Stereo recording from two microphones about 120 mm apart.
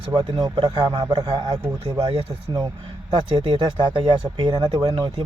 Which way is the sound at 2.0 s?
50° right (ahead or behind).